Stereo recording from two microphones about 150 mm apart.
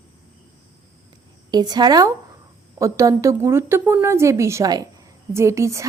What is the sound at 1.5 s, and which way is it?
A woman's voice, 25° right (ahead or behind).